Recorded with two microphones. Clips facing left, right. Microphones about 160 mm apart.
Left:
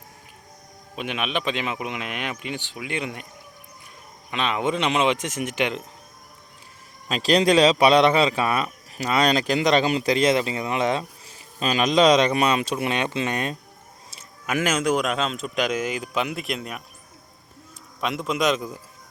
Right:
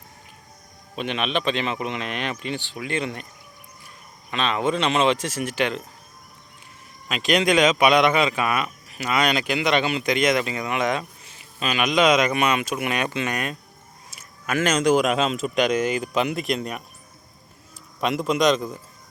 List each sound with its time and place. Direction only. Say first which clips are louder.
0.9 s speech: right 2 dB; 10° left (ahead or behind)
4.3 s speech: right 1 dB; 15° left (ahead or behind)
7.1 s a man's voice: left 2 dB; 35° left (ahead or behind)
14.4 s a man's voice: right 2 dB; 15° left (ahead or behind)
18.0 s a man's voice: right 3 dB; centre (ahead or behind)